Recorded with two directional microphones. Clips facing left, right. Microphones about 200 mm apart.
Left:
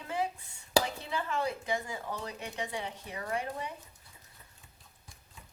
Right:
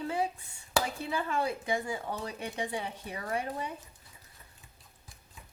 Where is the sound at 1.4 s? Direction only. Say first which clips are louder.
Right 2 dB; 30° right (ahead or behind).